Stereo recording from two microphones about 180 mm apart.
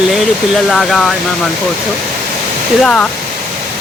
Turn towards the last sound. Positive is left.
turn(degrees=5)  # may be behind; listen again after turning